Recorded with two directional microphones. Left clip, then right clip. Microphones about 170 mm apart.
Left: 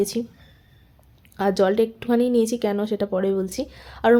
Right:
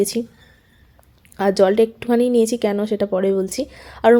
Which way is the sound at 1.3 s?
20° right (ahead or behind).